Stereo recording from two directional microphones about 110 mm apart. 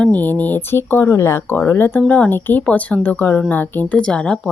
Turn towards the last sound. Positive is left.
turn(degrees=10)  # may be behind; listen again after turning